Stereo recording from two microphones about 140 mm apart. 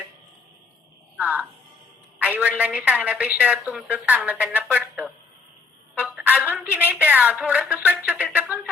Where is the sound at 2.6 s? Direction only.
10° right (ahead or behind).